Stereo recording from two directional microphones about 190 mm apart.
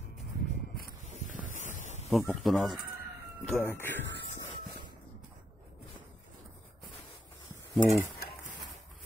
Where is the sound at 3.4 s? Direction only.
10° left (ahead or behind).